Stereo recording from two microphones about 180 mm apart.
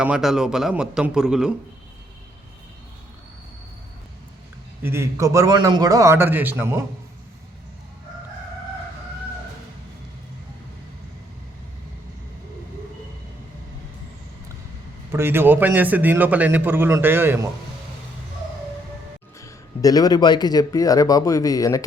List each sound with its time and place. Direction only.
0.0 s a man's voice: 5° right (ahead or behind)
4.8 s a man's voice: 15° right (ahead or behind)
15.1 s a man's voice: 10° right (ahead or behind)
19.4 s speech: 20° left (ahead or behind)